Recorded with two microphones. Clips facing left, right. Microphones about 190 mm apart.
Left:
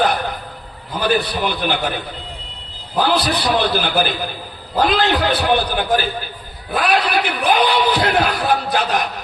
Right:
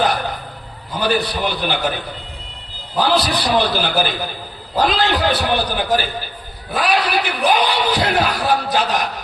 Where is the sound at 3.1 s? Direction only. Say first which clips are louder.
Right 1 dB; 55° left (ahead or behind).